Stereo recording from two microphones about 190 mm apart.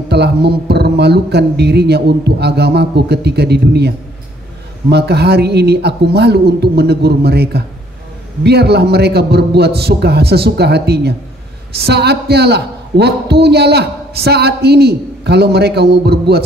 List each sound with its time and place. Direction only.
0.1 s a man's voice: 60° right (ahead or behind)